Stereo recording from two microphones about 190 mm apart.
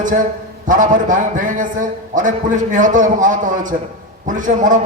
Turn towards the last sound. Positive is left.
turn(degrees=-45)  # may be behind; listen again after turning